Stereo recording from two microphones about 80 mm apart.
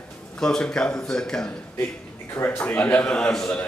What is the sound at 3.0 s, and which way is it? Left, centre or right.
Speech, centre.